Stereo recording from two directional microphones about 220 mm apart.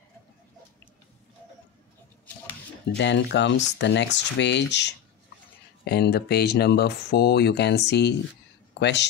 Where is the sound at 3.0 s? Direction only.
50° left (ahead or behind).